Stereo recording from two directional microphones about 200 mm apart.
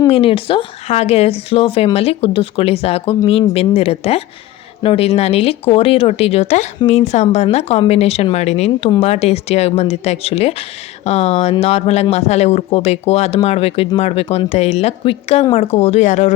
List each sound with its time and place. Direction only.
0.1 s speech: 30° left (ahead or behind)